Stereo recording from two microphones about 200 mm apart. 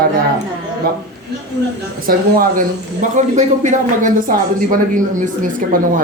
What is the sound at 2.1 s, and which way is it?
Speech, 45° right (ahead or behind).